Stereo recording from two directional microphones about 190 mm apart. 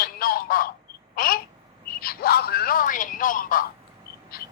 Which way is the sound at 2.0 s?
55° left (ahead or behind).